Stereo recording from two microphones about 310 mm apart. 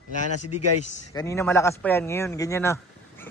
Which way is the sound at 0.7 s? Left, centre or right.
Left.